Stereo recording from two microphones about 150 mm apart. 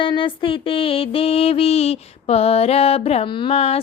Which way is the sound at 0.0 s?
35° left (ahead or behind).